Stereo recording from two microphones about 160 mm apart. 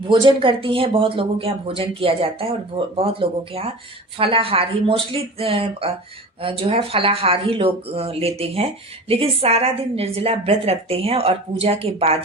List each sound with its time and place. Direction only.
0.1 s speech: 30° right (ahead or behind)